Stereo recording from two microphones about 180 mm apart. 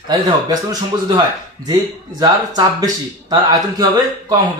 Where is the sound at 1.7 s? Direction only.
20° right (ahead or behind).